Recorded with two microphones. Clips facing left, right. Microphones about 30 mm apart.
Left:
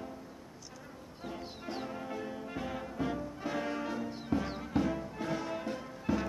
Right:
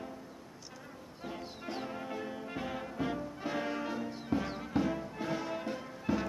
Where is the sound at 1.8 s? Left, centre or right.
Centre.